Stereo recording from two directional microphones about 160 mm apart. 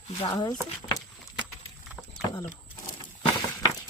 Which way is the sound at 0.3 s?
25° left (ahead or behind).